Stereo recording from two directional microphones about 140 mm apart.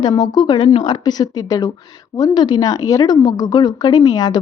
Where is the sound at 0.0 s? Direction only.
30° left (ahead or behind).